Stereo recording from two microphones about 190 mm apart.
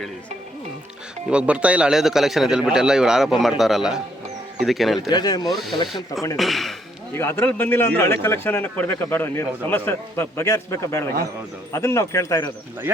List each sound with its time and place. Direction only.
1.3 s a man's voice: 5° right (ahead or behind)
4.9 s speech: 20° left (ahead or behind)
6.3 s a man's voice: centre (ahead or behind)
7.2 s a man's voice: 10° left (ahead or behind)